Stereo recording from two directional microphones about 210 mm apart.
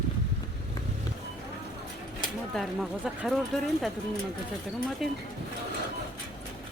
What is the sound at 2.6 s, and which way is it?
Speech, 5° right (ahead or behind).